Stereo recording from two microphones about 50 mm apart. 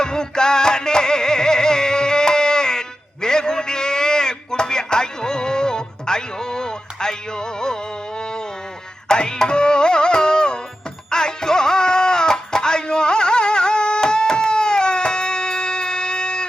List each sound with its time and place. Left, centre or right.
0.0 s music: centre
8.2 s a sound: centre
9.0 s carnatic music: centre
11.1 s music: centre